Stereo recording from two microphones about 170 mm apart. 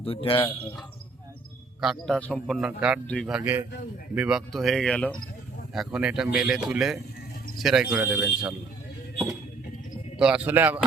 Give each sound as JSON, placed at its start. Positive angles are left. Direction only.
{"t": 0.0, "sound": "speech", "side_deg": 35}
{"t": 1.8, "sound": "speech", "side_deg": 0}
{"t": 2.6, "sound": "a man's voice", "side_deg": -5}
{"t": 3.1, "sound": "speech", "side_deg": 5}
{"t": 3.3, "sound": "a man's voice", "side_deg": -10}
{"t": 10.2, "sound": "a man's voice", "side_deg": -5}